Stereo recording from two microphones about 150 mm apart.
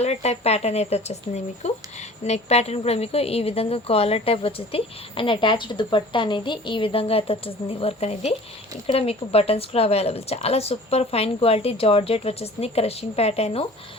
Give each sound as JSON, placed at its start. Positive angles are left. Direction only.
{"t": 0.0, "sound": "a woman's voice", "side_deg": 45}